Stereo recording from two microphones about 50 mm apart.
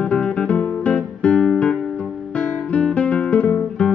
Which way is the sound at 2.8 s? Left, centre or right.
Left.